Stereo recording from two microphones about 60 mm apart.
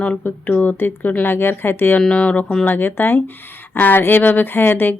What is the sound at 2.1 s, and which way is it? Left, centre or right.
Speech, centre.